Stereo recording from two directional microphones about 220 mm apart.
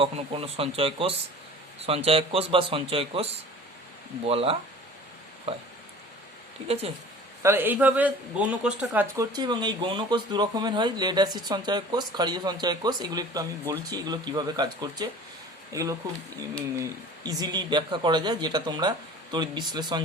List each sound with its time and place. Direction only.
0.0 s speech: 25° right (ahead or behind)
4.3 s speech: 25° right (ahead or behind)
7.4 s speech: 10° right (ahead or behind)